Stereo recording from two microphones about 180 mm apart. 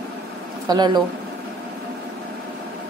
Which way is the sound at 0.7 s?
25° right (ahead or behind).